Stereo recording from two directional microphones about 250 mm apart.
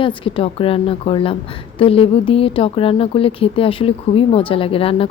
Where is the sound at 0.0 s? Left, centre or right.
Left.